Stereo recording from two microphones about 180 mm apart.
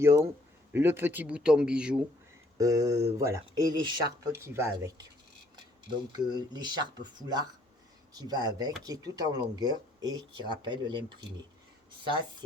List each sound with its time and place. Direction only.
0.0 s speech: 15° right (ahead or behind)
2.6 s speech: 20° right (ahead or behind)
6.3 s speech: 25° right (ahead or behind)